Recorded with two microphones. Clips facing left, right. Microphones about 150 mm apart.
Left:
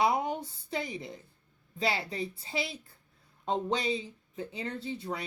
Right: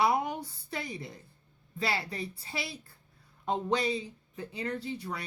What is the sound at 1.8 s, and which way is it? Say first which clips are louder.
A woman's voice: left 2 dB; 25° left (ahead or behind).